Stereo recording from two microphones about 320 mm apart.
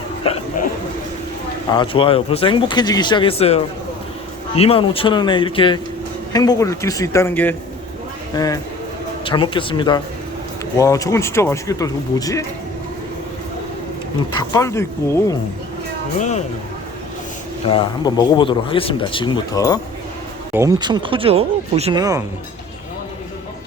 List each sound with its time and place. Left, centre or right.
0.2 s speech: centre
1.7 s speech: centre
14.3 s speech: centre
17.7 s speech: centre
20.5 s speech: centre